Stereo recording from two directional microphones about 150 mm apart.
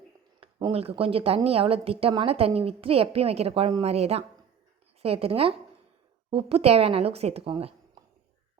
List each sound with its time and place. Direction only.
0.3 s a woman's voice: 35° right (ahead or behind)